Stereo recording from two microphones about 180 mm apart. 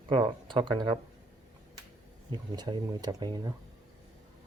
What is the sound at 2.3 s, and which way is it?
Speech, 25° right (ahead or behind).